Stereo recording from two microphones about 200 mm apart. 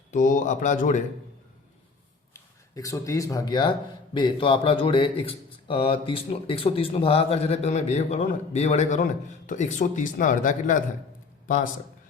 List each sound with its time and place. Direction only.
0.1 s speech: 40° left (ahead or behind)
2.3 s a man's voice: 15° left (ahead or behind); by 11.7 s 45° left (ahead or behind)